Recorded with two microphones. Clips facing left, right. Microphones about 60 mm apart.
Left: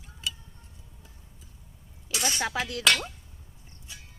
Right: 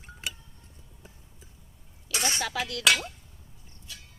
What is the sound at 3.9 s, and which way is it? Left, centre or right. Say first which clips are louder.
Music: even; left.